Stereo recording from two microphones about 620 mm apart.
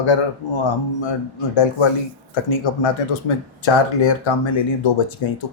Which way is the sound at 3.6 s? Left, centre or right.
Left.